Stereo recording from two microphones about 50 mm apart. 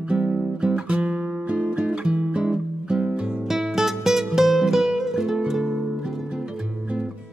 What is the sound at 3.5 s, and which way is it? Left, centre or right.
Music, centre.